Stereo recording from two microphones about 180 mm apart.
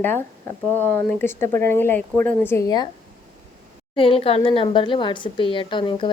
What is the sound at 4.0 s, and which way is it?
A woman's voice, 30° left (ahead or behind).